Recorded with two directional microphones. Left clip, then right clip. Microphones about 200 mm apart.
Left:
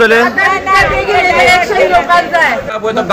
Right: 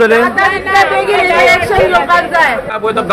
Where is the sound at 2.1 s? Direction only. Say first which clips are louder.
Even; 10° right (ahead or behind).